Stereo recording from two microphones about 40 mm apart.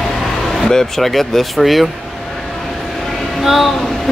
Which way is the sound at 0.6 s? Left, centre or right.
Centre.